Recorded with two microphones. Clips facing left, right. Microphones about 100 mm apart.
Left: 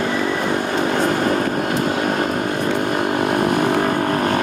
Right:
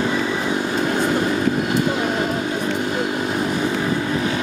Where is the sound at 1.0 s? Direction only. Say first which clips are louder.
Left 1 dB; 50° left (ahead or behind).